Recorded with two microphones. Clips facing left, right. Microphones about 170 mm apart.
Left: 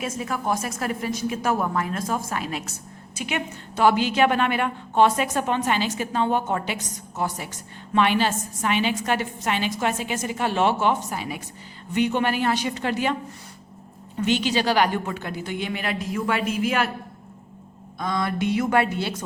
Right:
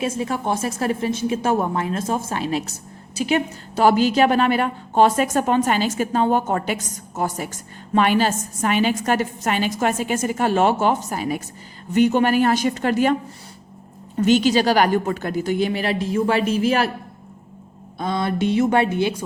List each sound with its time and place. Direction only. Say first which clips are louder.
0.0 s a woman's voice: right 4 dB; 30° right (ahead or behind); by 13.1 s 45° right (ahead or behind)
14.2 s speech: right 6 dB; 40° right (ahead or behind)
18.0 s a woman's voice: right 3 dB; 30° right (ahead or behind)